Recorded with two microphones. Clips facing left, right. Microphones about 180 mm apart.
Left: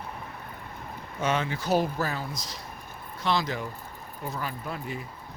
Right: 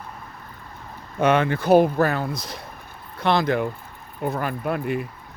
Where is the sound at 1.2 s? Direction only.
60° right (ahead or behind).